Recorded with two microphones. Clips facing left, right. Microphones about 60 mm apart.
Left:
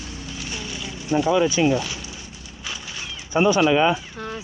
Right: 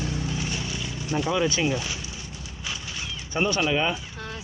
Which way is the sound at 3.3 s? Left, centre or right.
Centre.